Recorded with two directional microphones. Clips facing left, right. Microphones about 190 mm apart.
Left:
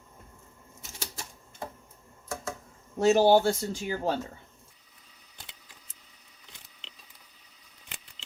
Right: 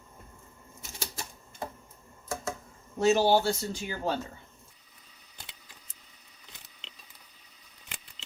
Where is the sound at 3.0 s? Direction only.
50° left (ahead or behind).